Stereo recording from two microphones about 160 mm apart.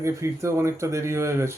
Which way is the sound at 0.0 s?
20° right (ahead or behind).